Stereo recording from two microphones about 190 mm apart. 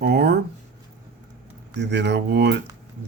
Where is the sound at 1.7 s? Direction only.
65° right (ahead or behind).